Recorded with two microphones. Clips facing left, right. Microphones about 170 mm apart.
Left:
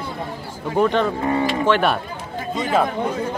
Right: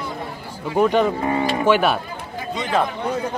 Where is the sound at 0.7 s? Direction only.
10° right (ahead or behind).